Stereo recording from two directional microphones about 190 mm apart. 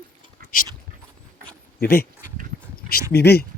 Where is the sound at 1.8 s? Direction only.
55° left (ahead or behind).